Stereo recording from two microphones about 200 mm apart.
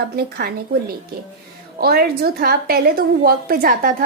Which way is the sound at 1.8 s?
50° right (ahead or behind).